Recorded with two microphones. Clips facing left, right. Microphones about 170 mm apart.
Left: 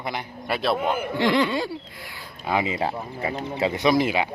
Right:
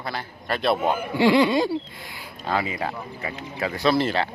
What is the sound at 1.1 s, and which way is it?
Speech, 10° right (ahead or behind).